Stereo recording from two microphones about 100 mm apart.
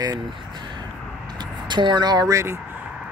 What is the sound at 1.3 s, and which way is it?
Vehicle, 50° right (ahead or behind).